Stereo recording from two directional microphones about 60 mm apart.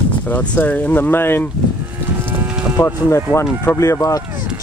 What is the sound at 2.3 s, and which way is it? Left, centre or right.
Cattle, right.